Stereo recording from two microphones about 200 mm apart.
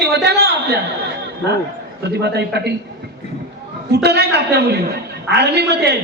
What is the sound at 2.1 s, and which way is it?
Speech, 55° right (ahead or behind).